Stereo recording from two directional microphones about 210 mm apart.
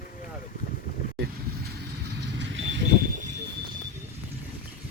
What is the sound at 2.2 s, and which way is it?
Vehicle, 55° right (ahead or behind).